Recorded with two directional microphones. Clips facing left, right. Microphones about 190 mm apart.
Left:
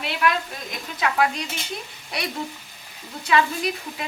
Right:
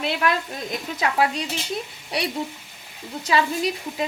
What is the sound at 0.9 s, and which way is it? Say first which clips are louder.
Speech: even; 25° right (ahead or behind).